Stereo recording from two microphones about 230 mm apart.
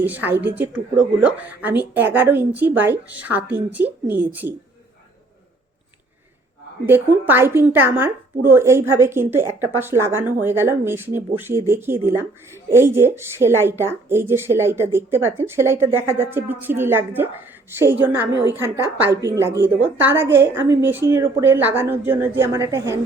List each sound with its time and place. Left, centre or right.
0.0 s speech: centre
6.8 s speech: centre